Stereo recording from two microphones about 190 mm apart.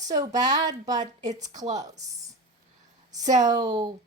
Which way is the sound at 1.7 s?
20° right (ahead or behind).